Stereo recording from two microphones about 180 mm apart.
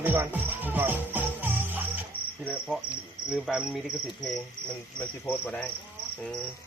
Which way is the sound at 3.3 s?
Centre (ahead or behind).